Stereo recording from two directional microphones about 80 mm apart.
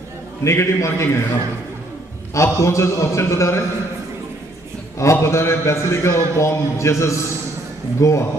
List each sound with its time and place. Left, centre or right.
0.4 s a man's voice: left
2.3 s a man's voice: left
4.9 s a man's voice: left